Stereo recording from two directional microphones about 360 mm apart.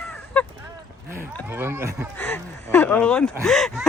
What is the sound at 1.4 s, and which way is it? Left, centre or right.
Speech, centre.